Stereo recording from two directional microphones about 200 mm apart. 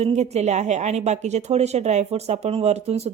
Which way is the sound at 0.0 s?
35° right (ahead or behind).